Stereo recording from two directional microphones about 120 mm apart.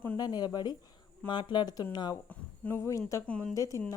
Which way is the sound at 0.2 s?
35° left (ahead or behind).